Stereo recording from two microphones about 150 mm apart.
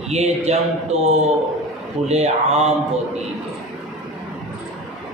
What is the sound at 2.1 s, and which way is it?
Speech, 45° right (ahead or behind).